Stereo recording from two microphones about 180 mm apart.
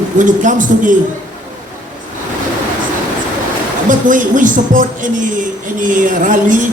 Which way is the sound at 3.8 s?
45° right (ahead or behind).